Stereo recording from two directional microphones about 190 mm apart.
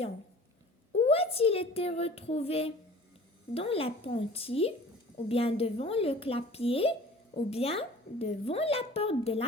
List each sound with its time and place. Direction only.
0.9 s a child's voice: 30° left (ahead or behind)